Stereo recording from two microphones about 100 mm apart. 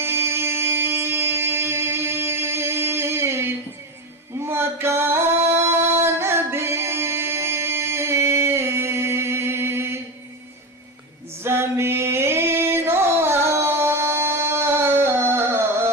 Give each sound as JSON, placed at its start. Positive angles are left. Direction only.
{"t": 0.0, "sound": "a sound", "side_deg": -25}
{"t": 5.5, "sound": "singing", "side_deg": -25}
{"t": 11.4, "sound": "singing", "side_deg": -25}